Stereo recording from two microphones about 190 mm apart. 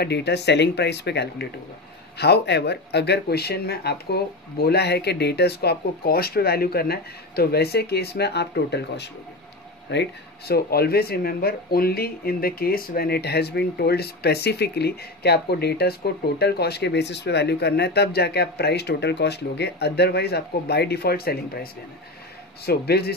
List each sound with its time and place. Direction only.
0.0 s speech: 60° left (ahead or behind)
22.7 s speech: 55° left (ahead or behind)